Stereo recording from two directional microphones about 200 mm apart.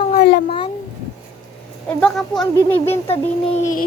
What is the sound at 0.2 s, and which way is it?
Cat, 55° left (ahead or behind).